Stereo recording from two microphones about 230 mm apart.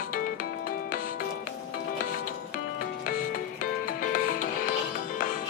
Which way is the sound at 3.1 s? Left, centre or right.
Left.